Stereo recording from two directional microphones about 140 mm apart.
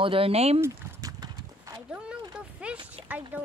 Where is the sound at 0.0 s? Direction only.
40° right (ahead or behind).